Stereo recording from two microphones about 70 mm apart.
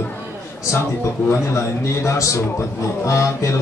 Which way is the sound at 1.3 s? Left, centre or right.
Left.